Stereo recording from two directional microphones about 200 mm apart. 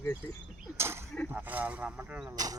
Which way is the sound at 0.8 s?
10° right (ahead or behind).